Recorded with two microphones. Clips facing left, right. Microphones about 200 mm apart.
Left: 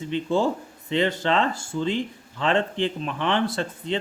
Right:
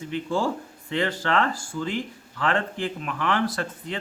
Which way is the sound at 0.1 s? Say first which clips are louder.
Left 3 dB; 20° left (ahead or behind).